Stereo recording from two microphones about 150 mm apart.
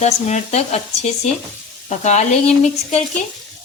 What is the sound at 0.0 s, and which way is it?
Speech, 50° left (ahead or behind).